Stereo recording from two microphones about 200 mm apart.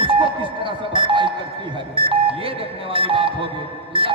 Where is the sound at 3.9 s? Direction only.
25° right (ahead or behind).